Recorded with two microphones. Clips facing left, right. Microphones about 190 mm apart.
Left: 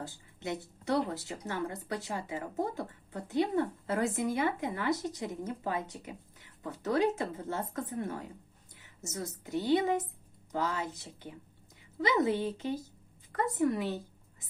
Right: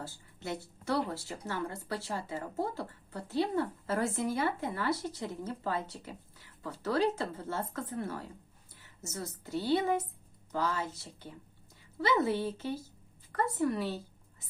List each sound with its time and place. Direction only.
0.0 s a woman's voice: 20° left (ahead or behind)